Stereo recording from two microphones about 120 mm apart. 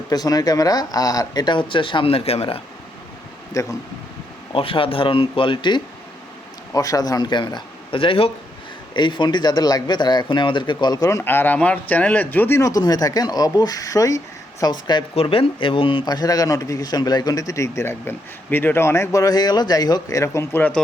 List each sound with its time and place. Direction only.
0.1 s a man's voice: 30° left (ahead or behind); by 2.6 s 55° left (ahead or behind)
3.5 s speech: 25° left (ahead or behind)
4.5 s speech: 50° left (ahead or behind)
6.7 s a man's voice: 30° left (ahead or behind)
11.2 s a man's voice: 20° left (ahead or behind); by 15.0 s 35° left (ahead or behind)
15.1 s a man's voice: 50° left (ahead or behind); by 20.8 s 15° left (ahead or behind)